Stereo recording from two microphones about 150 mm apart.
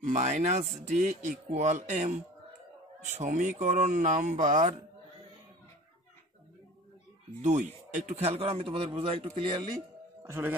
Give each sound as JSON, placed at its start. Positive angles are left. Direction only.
{"t": 0.1, "sound": "speech", "side_deg": -50}
{"t": 3.1, "sound": "speech", "side_deg": -55}
{"t": 7.4, "sound": "a man's voice", "side_deg": -50}
{"t": 10.2, "sound": "speech", "side_deg": -15}